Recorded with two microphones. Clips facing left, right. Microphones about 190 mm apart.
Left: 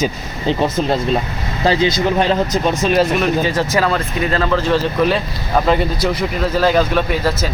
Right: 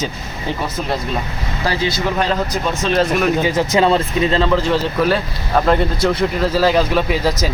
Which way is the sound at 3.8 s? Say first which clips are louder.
Right 3 dB; 25° right (ahead or behind).